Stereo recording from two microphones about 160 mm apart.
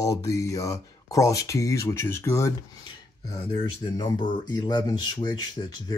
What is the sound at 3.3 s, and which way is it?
Speech, 30° left (ahead or behind).